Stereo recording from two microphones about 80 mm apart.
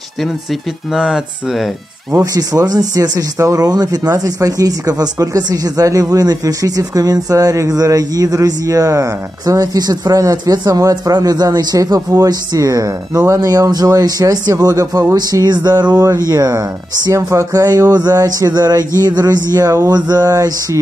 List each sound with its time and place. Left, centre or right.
0.9 s speech: centre
2.1 s speech: right
15.4 s a sound: right
16.3 s speech: right